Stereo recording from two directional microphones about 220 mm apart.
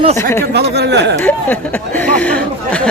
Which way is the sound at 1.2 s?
10° left (ahead or behind).